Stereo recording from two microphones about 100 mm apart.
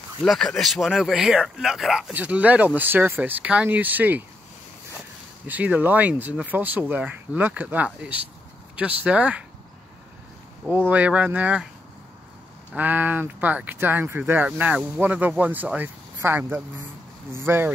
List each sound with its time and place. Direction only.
0.3 s speech: 5° left (ahead or behind)
2.1 s speech: 15° right (ahead or behind)
5.5 s speech: 15° right (ahead or behind)
10.9 s speech: 15° right (ahead or behind)
12.7 s speech: 15° right (ahead or behind)